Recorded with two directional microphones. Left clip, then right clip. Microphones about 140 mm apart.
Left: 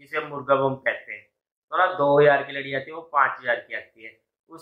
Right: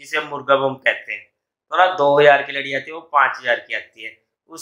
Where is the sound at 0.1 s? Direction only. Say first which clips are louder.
Right 5 dB; 20° right (ahead or behind).